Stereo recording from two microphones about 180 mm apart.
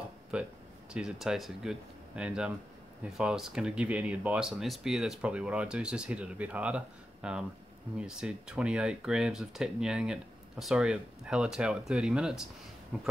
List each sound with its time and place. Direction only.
0.3 s speech: 5° right (ahead or behind)